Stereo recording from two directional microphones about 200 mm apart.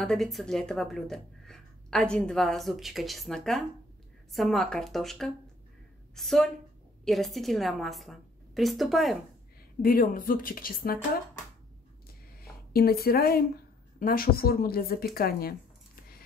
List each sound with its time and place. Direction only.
0.0 s speech: centre (ahead or behind)
9.8 s a woman's voice: 45° left (ahead or behind)
12.4 s a woman's voice: 50° left (ahead or behind)